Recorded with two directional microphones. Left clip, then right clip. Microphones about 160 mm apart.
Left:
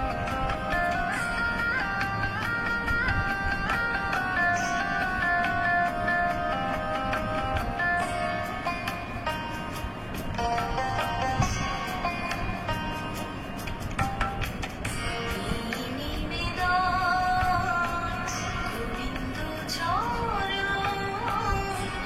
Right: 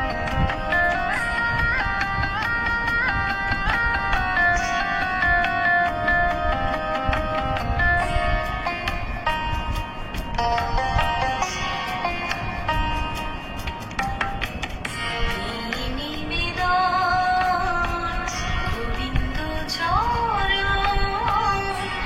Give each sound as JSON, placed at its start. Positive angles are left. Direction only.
{"t": 0.4, "sound": "music", "side_deg": -25}
{"t": 10.4, "sound": "music", "side_deg": -25}
{"t": 16.5, "sound": "music", "side_deg": -25}
{"t": 19.8, "sound": "music", "side_deg": -25}